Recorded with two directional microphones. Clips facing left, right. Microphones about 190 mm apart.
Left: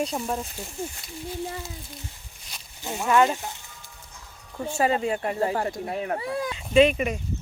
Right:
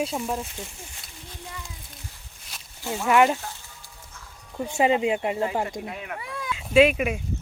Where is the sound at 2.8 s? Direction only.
15° left (ahead or behind).